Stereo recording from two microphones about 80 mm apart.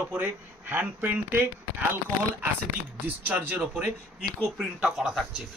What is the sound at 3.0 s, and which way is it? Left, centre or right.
Speech, centre.